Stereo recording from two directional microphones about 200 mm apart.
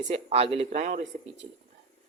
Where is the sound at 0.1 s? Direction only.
30° right (ahead or behind).